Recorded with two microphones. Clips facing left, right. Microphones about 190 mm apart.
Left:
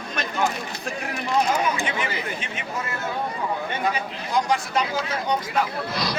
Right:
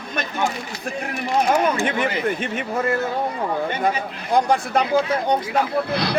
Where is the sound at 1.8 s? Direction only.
55° right (ahead or behind).